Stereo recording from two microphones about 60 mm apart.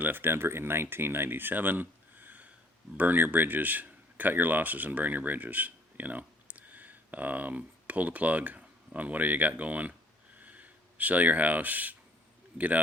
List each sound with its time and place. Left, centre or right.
0.0 s speech: right